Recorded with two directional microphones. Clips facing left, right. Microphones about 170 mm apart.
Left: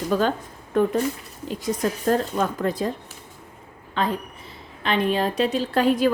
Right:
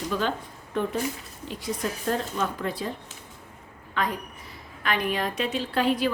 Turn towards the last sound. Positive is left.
turn(degrees=45)  # may be behind; listen again after turning